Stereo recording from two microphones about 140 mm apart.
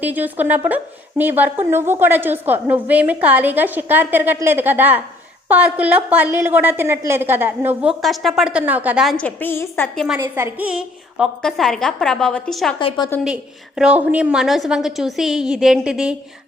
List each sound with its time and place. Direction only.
0.0 s a woman's voice: 10° right (ahead or behind)
8.0 s a woman's voice: centre (ahead or behind)
9.0 s a woman's voice: 10° left (ahead or behind)
9.9 s a woman's voice: centre (ahead or behind)
10.2 s a woman's voice: 20° right (ahead or behind)
10.7 s a woman's voice: 5° right (ahead or behind)